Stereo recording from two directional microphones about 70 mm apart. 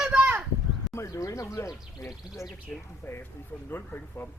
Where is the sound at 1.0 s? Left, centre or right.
Left.